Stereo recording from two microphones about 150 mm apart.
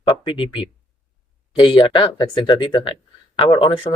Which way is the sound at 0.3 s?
35° left (ahead or behind).